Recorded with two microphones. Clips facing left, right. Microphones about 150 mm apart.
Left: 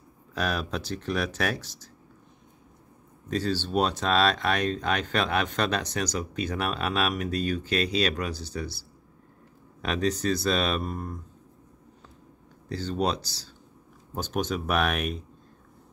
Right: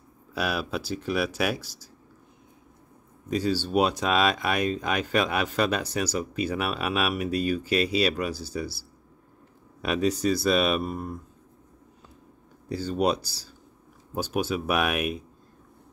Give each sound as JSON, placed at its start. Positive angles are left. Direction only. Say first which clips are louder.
{"t": 0.3, "sound": "speech", "louder": "right 1 dB", "side_deg": -10}
{"t": 3.3, "sound": "speech", "louder": "right 2 dB", "side_deg": -10}
{"t": 12.6, "sound": "speech", "louder": "right 3 dB", "side_deg": -10}